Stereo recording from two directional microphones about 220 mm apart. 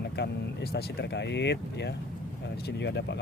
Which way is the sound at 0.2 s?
45° left (ahead or behind).